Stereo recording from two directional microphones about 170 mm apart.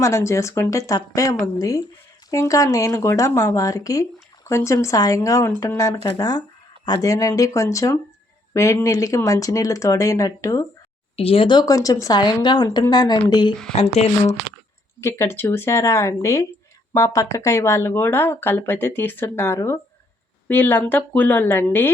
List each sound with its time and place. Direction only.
0.0 s speech: 15° left (ahead or behind)
11.2 s speech: 35° left (ahead or behind)
13.7 s speech: 40° left (ahead or behind)
15.0 s speech: 15° left (ahead or behind)